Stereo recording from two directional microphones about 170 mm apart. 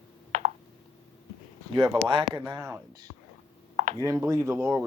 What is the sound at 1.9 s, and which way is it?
Speech, 30° right (ahead or behind).